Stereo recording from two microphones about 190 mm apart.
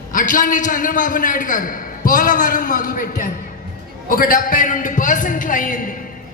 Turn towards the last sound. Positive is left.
turn(degrees=45)  # may be behind; listen again after turning